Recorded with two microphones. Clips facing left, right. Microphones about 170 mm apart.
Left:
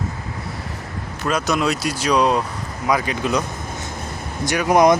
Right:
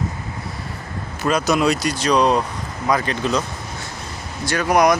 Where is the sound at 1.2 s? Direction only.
Centre (ahead or behind).